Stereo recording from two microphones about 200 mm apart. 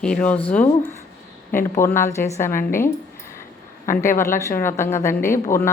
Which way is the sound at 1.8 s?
15° left (ahead or behind).